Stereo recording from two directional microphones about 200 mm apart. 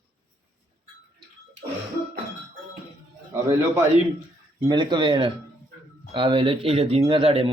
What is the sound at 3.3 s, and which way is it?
A man's voice, 15° right (ahead or behind).